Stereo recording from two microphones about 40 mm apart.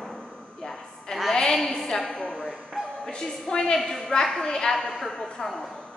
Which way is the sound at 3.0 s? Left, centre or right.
Centre.